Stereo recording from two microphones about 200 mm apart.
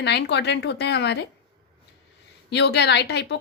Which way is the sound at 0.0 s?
55° left (ahead or behind).